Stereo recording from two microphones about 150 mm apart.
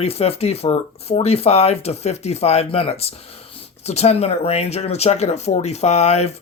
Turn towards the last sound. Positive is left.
turn(degrees=45)  # may be behind; listen again after turning